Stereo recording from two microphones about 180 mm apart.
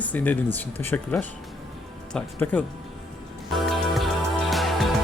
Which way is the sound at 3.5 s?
Centre (ahead or behind).